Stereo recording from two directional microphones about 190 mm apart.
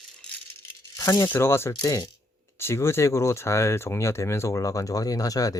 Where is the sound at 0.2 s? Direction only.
10° left (ahead or behind).